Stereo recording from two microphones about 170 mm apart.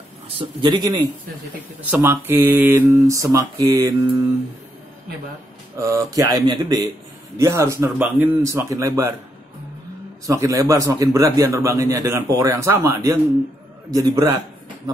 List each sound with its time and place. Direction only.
0.6 s a man's voice: 25° right (ahead or behind)
1.8 s speech: 10° right (ahead or behind)
5.8 s a man's voice: 15° right (ahead or behind)
10.2 s a man's voice: 20° right (ahead or behind)